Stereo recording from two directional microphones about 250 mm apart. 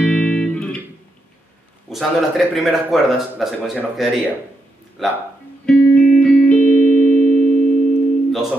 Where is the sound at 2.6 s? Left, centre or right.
Centre.